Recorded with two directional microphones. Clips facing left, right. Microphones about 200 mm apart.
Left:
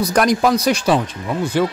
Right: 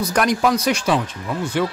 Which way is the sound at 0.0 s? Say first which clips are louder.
Left 3 dB; 40° left (ahead or behind).